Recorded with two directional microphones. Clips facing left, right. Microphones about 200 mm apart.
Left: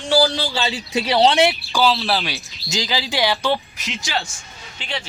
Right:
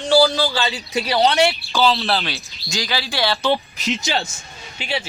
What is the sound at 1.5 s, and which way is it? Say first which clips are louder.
Speech: even; centre (ahead or behind).